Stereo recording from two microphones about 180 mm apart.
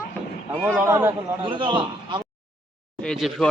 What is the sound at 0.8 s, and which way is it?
Speech, 15° right (ahead or behind).